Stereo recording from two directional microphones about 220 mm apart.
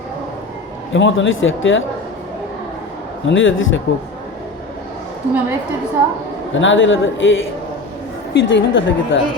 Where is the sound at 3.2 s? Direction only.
60° left (ahead or behind).